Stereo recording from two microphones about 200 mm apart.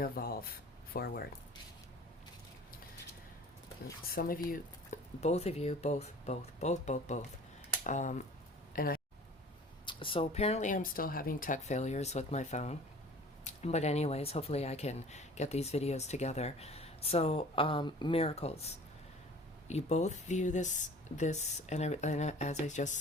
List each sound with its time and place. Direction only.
0.0 s speech: 50° left (ahead or behind)
4.1 s speech: 45° left (ahead or behind)
9.8 s speech: 25° left (ahead or behind)